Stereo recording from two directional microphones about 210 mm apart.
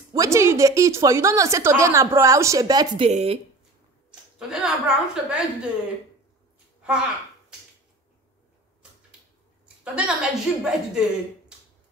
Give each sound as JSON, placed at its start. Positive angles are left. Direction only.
{"t": 0.1, "sound": "speech", "side_deg": -15}
{"t": 3.1, "sound": "speech", "side_deg": -30}
{"t": 4.1, "sound": "a woman's voice", "side_deg": -5}
{"t": 9.9, "sound": "a woman's voice", "side_deg": -5}